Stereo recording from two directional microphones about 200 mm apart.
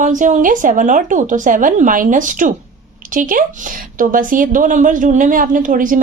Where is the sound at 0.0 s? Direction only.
40° right (ahead or behind).